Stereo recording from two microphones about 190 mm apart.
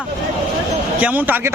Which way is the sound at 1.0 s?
10° right (ahead or behind).